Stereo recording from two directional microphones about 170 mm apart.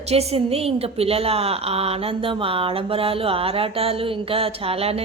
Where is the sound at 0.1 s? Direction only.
35° right (ahead or behind).